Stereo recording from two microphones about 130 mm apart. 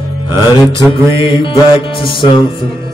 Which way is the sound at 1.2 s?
40° left (ahead or behind).